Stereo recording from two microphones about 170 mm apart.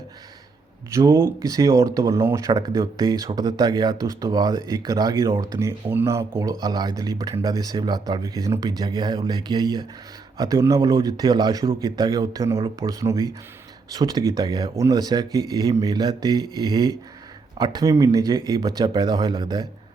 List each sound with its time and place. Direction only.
0.9 s speech: 15° right (ahead or behind)